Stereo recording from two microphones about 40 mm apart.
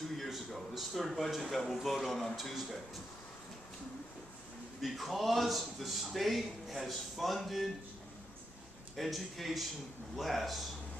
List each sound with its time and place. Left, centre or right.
0.3 s speech: centre
4.8 s speech: centre
8.9 s speech: centre